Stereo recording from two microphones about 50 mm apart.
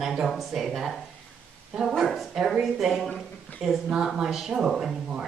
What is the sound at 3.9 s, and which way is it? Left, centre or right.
Speech, centre.